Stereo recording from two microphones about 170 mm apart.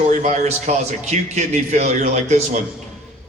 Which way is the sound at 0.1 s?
45° right (ahead or behind).